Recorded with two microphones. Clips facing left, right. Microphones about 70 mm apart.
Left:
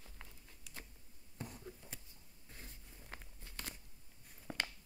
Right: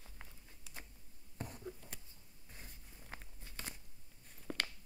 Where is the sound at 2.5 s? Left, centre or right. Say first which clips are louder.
Left 1 dB; centre.